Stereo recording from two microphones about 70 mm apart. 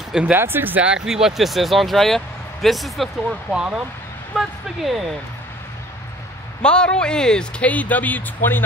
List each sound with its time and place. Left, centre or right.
0.3 s speech: right
0.8 s speech: centre
3.3 s speech: centre
6.6 s speech: centre